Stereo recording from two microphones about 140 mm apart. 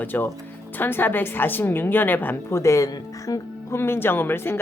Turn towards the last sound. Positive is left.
turn(degrees=15)  # may be behind; listen again after turning